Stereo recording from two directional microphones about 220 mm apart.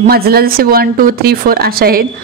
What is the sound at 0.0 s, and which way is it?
A man's voice, 45° right (ahead or behind).